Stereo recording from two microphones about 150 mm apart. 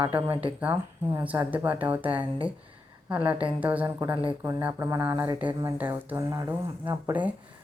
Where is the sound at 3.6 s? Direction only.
10° right (ahead or behind).